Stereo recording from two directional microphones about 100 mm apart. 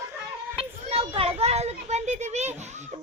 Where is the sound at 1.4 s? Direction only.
90° right.